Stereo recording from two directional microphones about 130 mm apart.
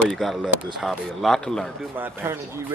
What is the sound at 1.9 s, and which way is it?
Speech, 15° right (ahead or behind).